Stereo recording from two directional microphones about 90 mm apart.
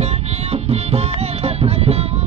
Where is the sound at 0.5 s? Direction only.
90° right.